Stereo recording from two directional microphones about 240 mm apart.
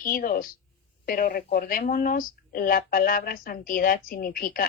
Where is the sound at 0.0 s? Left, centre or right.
Left.